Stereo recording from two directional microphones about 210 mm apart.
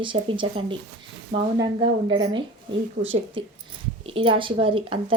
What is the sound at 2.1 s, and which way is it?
Speech, 20° right (ahead or behind).